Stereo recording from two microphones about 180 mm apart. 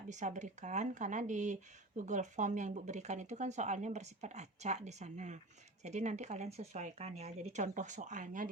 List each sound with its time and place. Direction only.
0.1 s speech: 40° right (ahead or behind)